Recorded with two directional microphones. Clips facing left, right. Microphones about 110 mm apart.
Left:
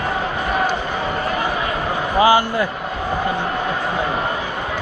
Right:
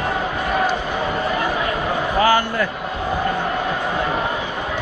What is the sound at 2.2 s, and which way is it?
Speech, 15° left (ahead or behind).